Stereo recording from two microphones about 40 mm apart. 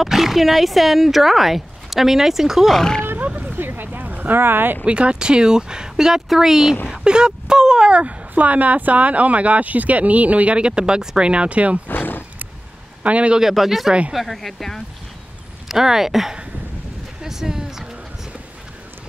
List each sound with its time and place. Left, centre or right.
0.0 s speech: centre
2.7 s speech: centre
3.5 s vehicle: right
4.8 s speech: right
7.9 s speech: right
11.9 s roaring cats: left
13.0 s a man's voice: right
13.4 s speech: centre
15.7 s speech: centre
17.2 s a sound: centre